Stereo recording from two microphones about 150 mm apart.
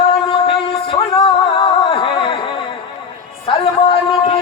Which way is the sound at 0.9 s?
40° left (ahead or behind).